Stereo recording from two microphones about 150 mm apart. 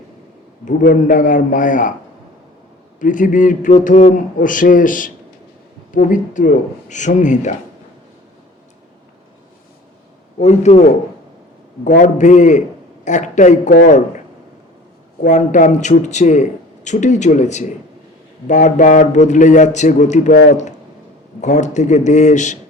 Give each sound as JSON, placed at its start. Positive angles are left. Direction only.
{"t": 0.6, "sound": "a man's voice", "side_deg": 65}
{"t": 3.0, "sound": "a man's voice", "side_deg": 60}
{"t": 10.3, "sound": "speech", "side_deg": 50}
{"t": 11.9, "sound": "a man's voice", "side_deg": 55}
{"t": 15.2, "sound": "a man's voice", "side_deg": 55}